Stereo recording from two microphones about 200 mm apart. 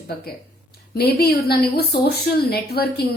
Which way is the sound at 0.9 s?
50° left (ahead or behind).